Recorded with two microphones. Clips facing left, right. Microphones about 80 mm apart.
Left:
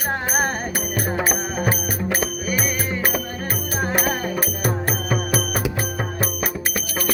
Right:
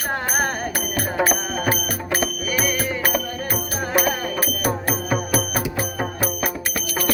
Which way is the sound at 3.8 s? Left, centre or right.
Left.